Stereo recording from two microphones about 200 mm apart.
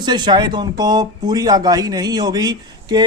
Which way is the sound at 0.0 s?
20° right (ahead or behind).